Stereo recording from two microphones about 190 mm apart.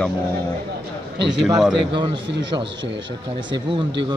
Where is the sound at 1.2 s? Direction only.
65° right (ahead or behind).